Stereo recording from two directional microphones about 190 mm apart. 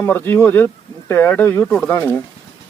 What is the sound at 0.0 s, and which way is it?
Speech, 10° left (ahead or behind).